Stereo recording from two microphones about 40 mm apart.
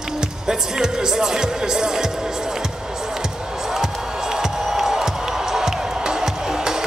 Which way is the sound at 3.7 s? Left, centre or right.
Centre.